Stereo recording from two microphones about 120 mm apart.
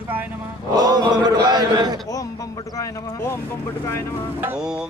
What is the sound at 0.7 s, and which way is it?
Chant, 35° right (ahead or behind).